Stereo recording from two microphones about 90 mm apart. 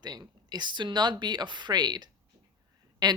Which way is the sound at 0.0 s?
50° right (ahead or behind).